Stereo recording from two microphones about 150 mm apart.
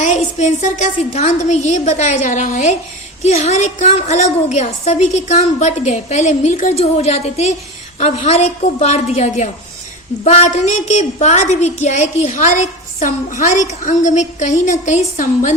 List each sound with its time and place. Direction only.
0.0 s a woman's voice: 50° left (ahead or behind)